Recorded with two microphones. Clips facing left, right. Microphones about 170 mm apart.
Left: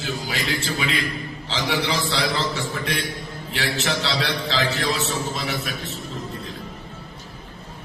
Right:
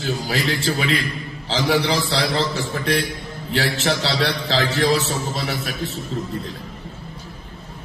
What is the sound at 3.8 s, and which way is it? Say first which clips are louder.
A man's voice: right 4 dB; 35° right (ahead or behind).